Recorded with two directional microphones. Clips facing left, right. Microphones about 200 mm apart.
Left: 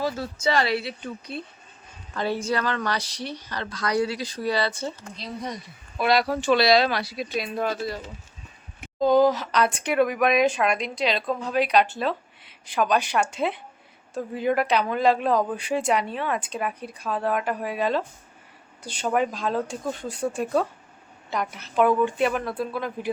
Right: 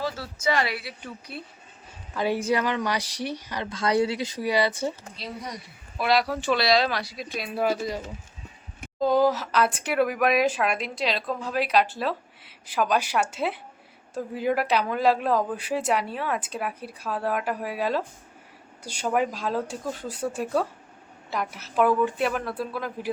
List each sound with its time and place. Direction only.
0.4 s a woman's voice: 30° left (ahead or behind)
2.1 s a woman's voice: 15° right (ahead or behind)
4.4 s a woman's voice: 15° right (ahead or behind)
6.0 s a woman's voice: centre (ahead or behind)